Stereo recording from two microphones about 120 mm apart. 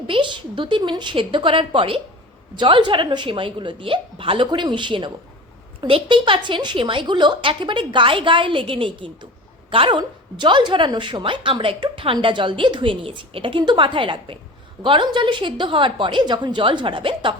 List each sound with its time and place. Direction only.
0.1 s a woman's voice: 45° right (ahead or behind)